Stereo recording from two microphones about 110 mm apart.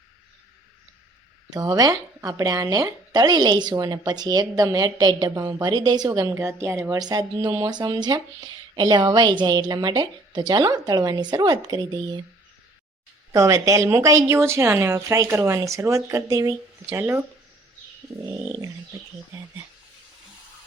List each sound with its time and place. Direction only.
1.5 s speech: 35° right (ahead or behind)
6.4 s a woman's voice: 25° right (ahead or behind)
7.0 s speech: 35° right (ahead or behind)
13.3 s a woman's voice: 30° right (ahead or behind)
17.0 s a woman's voice: 20° right (ahead or behind)